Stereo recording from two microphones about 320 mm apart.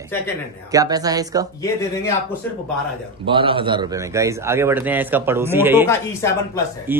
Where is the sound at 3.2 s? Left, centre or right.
Centre.